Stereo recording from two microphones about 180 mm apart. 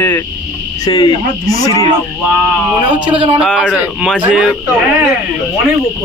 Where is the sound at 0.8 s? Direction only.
25° left (ahead or behind).